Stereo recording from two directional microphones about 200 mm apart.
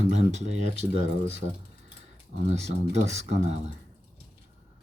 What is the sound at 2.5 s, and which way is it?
Speech, 35° right (ahead or behind).